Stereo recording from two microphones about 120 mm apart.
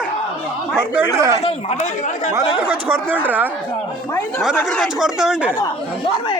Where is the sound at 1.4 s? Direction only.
65° left (ahead or behind).